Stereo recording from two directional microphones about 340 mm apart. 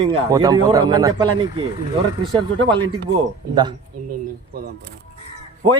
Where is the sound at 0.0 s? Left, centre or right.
Centre.